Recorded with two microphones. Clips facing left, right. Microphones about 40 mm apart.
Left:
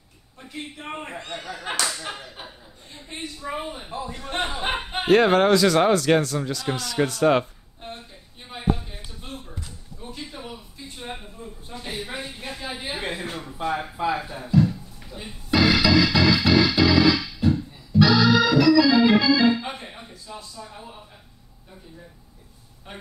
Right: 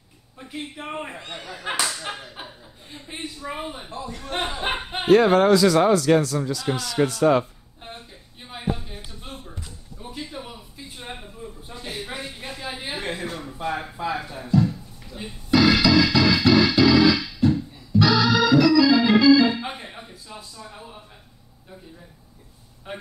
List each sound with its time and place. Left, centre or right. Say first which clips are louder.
0.8 s speech: right 1 dB; centre
3.9 s a man's voice: left 1 dB; centre
4.3 s speech: even; centre
5.1 s speech: right 1 dB; left
5.5 s speech: right 1 dB; left
7.8 s a sound: left 2 dB; centre
10.1 s speech: right 3 dB; centre
11.7 s a man's voice: left 1 dB; centre
14.3 s a sound: even; centre
15.5 s music: right 1 dB; centre
19.6 s a sound: right 1 dB; centre
22.9 s speech: right 5 dB; centre